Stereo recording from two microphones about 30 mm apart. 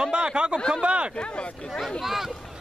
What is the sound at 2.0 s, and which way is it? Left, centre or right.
Speech, centre.